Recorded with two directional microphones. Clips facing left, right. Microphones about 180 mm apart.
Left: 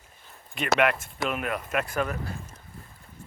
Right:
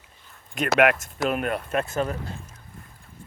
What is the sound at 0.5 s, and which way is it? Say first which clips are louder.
Speech: right 4 dB; 45° right (ahead or behind).